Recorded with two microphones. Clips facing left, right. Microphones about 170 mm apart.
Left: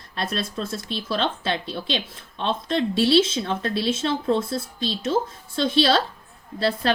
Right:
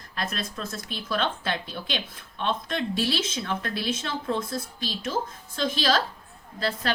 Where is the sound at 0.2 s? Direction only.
30° left (ahead or behind).